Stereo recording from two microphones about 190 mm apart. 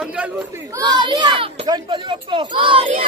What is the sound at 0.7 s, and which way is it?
Speech, 20° right (ahead or behind).